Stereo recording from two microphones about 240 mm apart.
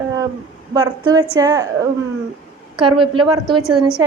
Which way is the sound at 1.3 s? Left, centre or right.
Centre.